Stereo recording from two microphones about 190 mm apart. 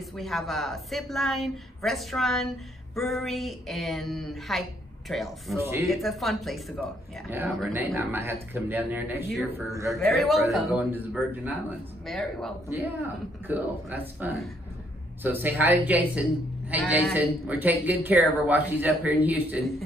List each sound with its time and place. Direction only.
0.1 s a woman's voice: centre (ahead or behind)
5.6 s speech: 15° right (ahead or behind)
5.9 s a woman's voice: centre (ahead or behind); by 9.9 s 15° right (ahead or behind)
10.1 s a woman's voice: centre (ahead or behind)
12.1 s a woman's voice: centre (ahead or behind)
13.5 s speech: 10° right (ahead or behind)